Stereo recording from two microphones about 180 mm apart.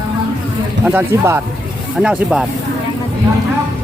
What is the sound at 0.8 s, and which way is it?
Speech, 10° right (ahead or behind).